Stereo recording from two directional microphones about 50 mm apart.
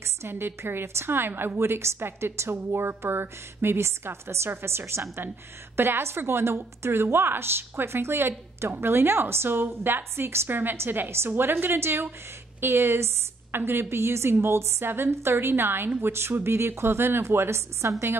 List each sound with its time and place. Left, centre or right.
0.2 s a woman's voice: right
1.6 s a woman's voice: right